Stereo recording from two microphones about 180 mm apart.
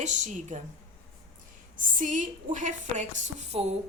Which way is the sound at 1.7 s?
45° right (ahead or behind).